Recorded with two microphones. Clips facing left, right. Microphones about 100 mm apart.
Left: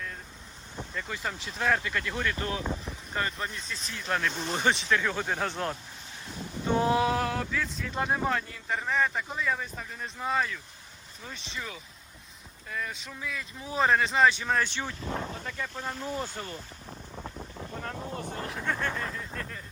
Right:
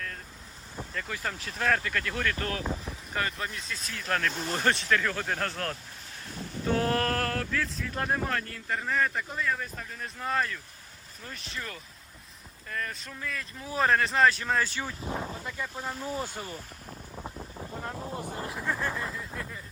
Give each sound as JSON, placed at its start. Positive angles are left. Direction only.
{"t": 0.8, "sound": "speech", "side_deg": 0}
{"t": 2.6, "sound": "speech", "side_deg": 0}
{"t": 6.7, "sound": "speech", "side_deg": 10}
{"t": 15.0, "sound": "speech", "side_deg": -20}
{"t": 15.3, "sound": "wind noise", "side_deg": -10}
{"t": 18.1, "sound": "vehicle", "side_deg": -10}
{"t": 18.5, "sound": "a sound", "side_deg": -5}